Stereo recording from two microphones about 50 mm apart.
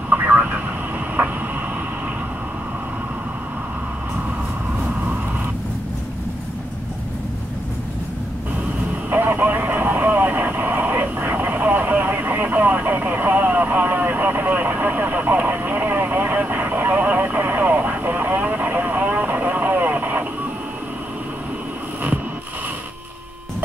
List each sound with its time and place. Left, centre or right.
0.1 s vehicle: right
9.1 s vehicle: right